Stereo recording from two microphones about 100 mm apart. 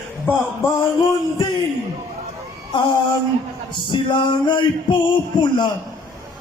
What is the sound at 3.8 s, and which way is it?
Male singing, 55° left (ahead or behind).